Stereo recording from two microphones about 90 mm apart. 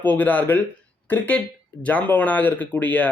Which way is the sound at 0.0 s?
20° left (ahead or behind).